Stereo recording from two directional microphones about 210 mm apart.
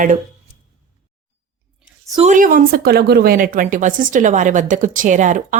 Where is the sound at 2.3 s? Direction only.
40° right (ahead or behind).